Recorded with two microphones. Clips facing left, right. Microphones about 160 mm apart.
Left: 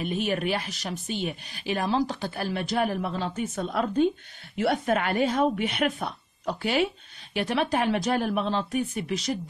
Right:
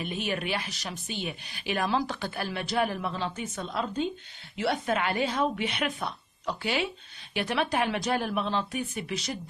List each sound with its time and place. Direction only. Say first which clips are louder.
0.0 s speech: left 5 dB; 40° left (ahead or behind)